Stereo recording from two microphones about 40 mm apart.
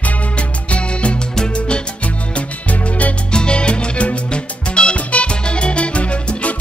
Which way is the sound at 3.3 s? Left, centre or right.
Left.